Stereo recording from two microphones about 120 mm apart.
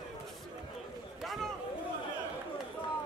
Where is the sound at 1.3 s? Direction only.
Centre (ahead or behind).